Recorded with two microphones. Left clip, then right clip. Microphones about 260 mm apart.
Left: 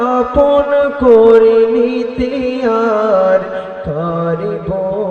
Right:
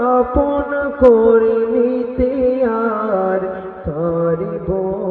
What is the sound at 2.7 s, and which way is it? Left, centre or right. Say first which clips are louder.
Music: left 6 dB; left.